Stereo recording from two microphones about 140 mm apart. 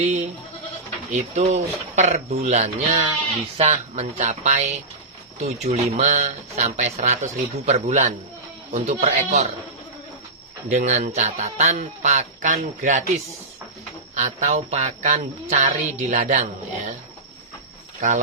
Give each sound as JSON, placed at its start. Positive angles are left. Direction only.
{"t": 0.0, "sound": "music", "side_deg": -55}
{"t": 10.7, "sound": "music", "side_deg": -55}
{"t": 14.2, "sound": "music", "side_deg": -60}